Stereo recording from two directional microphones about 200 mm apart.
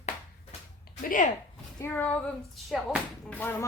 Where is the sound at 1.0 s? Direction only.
40° left (ahead or behind).